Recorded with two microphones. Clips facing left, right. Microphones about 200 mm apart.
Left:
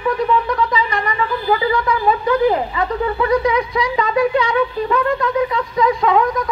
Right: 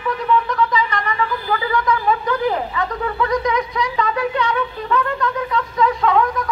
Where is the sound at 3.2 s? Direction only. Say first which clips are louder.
Left 3 dB; 10° left (ahead or behind).